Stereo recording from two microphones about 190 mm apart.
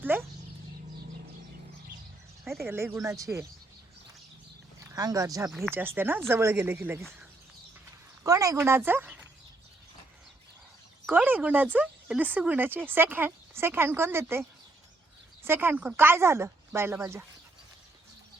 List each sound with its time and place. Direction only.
0.0 s a sound: 10° right (ahead or behind)
2.6 s speech: 15° right (ahead or behind)
4.8 s speech: 20° right (ahead or behind)
5.5 s speech: centre (ahead or behind)
5.7 s speech: 10° right (ahead or behind)
8.2 s speech: 15° right (ahead or behind)
11.0 s speech: 10° right (ahead or behind)
15.4 s speech: 10° right (ahead or behind)